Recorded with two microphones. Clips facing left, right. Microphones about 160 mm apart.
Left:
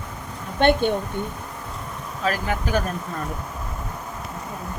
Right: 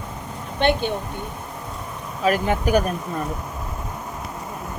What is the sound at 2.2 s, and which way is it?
Speech, 20° right (ahead or behind).